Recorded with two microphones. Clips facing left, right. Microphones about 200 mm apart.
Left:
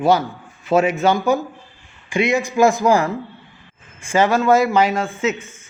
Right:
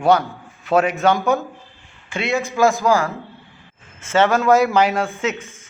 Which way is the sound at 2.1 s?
15° left (ahead or behind).